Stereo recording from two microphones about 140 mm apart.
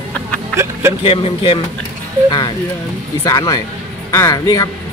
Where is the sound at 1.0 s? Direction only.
40° left (ahead or behind).